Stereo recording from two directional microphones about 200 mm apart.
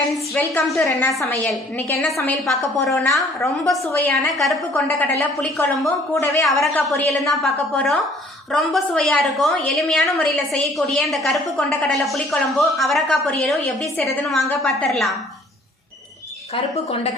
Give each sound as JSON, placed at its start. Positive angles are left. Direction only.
{"t": 0.5, "sound": "a woman's voice", "side_deg": 5}
{"t": 2.9, "sound": "speech", "side_deg": 15}
{"t": 3.4, "sound": "a woman's voice", "side_deg": 0}
{"t": 6.4, "sound": "a woman's voice", "side_deg": 0}
{"t": 16.7, "sound": "speech", "side_deg": 30}